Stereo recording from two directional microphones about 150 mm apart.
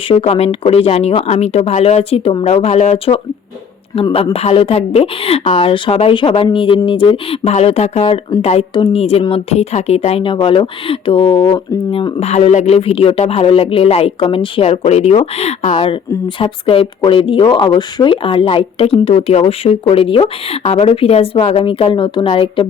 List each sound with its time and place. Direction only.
0.1 s a woman's voice: 45° left (ahead or behind)